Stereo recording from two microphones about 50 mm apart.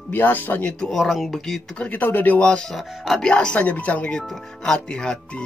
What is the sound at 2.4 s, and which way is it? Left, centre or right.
Speech, centre.